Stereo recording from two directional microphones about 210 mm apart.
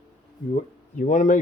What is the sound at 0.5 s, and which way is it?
Speech, 35° left (ahead or behind).